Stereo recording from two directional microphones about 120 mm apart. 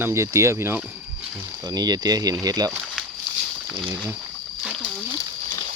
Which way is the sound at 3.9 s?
15° right (ahead or behind).